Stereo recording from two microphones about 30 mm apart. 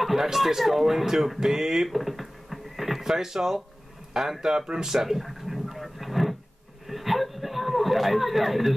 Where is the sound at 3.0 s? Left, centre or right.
Centre.